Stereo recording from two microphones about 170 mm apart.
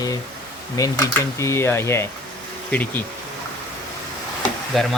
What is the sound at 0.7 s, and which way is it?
Speech, 20° left (ahead or behind).